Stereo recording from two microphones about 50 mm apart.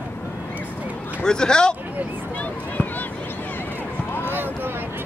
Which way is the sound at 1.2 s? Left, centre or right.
Centre.